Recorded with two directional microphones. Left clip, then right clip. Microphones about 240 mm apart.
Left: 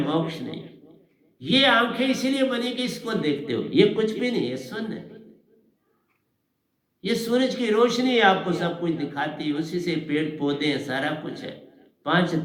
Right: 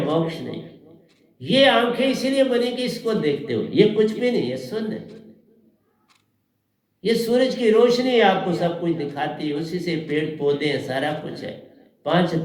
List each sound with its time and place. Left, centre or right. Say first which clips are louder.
1.4 s speech: right 3 dB; left
7.0 s speech: right 4 dB; left